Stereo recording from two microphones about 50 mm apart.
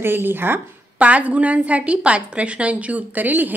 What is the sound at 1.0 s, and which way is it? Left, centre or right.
A woman's voice, right.